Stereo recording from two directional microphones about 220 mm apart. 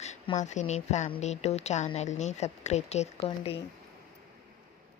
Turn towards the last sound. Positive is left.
turn(degrees=25)  # may be behind; listen again after turning